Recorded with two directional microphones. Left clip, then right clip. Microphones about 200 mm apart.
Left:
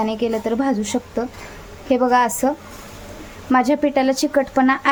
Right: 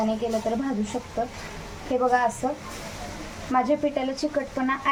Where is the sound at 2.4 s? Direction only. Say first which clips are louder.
Left 7 dB; 60° left (ahead or behind).